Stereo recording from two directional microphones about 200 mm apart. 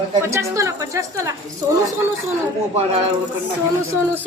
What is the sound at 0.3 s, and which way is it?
A woman's voice, 15° right (ahead or behind).